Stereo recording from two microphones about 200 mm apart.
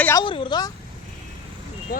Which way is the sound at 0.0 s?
15° left (ahead or behind).